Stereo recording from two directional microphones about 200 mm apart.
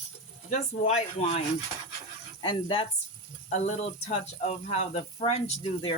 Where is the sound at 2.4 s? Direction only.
25° left (ahead or behind).